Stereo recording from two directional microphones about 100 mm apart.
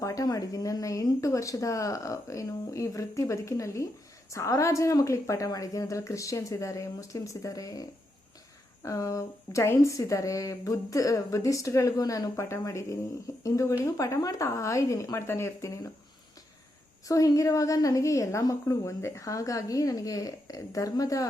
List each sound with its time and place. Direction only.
0.0 s speech: 35° left (ahead or behind)
17.1 s speech: 35° left (ahead or behind)